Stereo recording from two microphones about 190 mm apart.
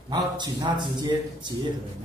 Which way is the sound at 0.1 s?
20° right (ahead or behind).